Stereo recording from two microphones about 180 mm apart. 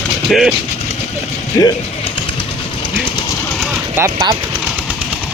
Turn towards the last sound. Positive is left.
turn(degrees=-10)  # may be behind; listen again after turning